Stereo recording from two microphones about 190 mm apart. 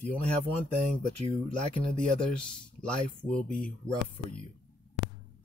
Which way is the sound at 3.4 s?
45° left (ahead or behind).